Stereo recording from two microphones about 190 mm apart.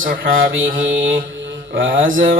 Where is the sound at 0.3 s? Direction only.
90° right.